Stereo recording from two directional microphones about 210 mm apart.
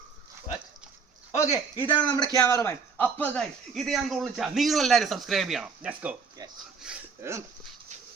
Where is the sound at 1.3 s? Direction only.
15° left (ahead or behind); by 6.2 s 5° right (ahead or behind).